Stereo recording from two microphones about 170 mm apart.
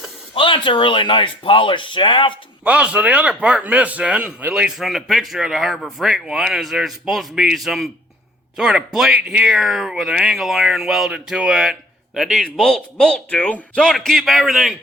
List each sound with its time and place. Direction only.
0.3 s speech: 30° left (ahead or behind)
2.6 s a man's voice: 5° right (ahead or behind)